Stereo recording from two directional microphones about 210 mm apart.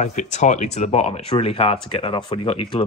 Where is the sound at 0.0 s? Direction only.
35° left (ahead or behind).